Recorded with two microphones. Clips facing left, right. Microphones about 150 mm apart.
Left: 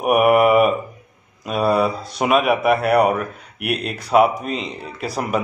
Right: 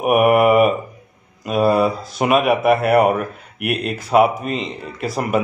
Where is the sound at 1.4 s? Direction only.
Centre (ahead or behind).